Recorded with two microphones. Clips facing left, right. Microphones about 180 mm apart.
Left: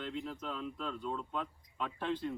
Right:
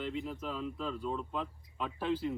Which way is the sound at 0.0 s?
5° right (ahead or behind).